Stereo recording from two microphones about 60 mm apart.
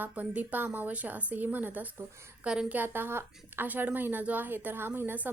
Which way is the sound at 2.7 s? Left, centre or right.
Right.